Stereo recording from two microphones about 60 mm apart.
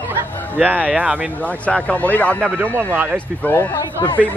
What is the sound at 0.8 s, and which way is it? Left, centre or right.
Speech, right.